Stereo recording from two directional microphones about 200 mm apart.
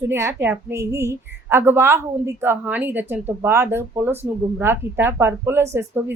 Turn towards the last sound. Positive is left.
turn(degrees=-10)  # may be behind; listen again after turning